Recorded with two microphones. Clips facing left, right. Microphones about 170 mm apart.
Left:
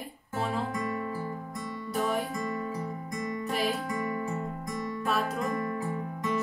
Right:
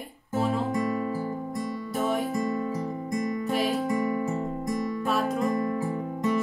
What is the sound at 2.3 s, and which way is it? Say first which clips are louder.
Music: right 5 dB; 20° right (ahead or behind).